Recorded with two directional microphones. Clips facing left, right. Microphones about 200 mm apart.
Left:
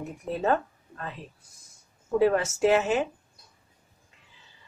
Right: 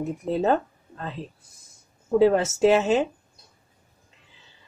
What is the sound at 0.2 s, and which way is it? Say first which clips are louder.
A woman's voice: right 3 dB; 25° right (ahead or behind).